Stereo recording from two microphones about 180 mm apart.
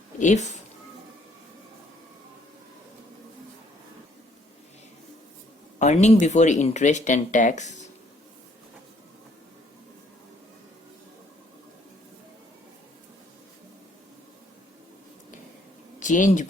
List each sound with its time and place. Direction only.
0.2 s speech: 40° left (ahead or behind)
5.8 s speech: 40° left (ahead or behind)
16.0 s speech: 45° left (ahead or behind)